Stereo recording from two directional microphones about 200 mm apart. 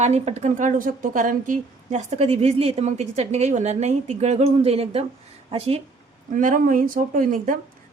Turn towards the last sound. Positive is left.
turn(degrees=-45)  # may be behind; listen again after turning